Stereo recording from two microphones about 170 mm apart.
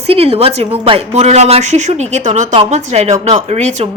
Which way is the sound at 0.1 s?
35° right (ahead or behind).